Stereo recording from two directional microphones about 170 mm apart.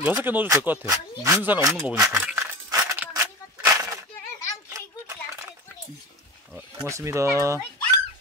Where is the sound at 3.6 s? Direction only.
20° right (ahead or behind).